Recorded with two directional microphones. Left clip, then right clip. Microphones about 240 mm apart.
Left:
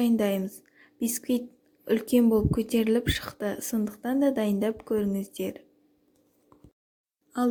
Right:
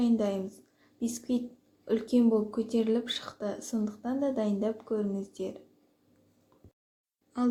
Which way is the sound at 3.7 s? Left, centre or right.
Left.